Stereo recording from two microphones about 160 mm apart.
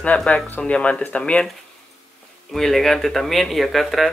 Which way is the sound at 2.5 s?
Centre (ahead or behind).